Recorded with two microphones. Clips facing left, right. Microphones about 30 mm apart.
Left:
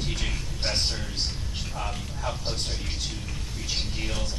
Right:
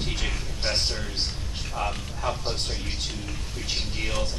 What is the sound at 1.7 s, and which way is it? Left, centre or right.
Speech, right.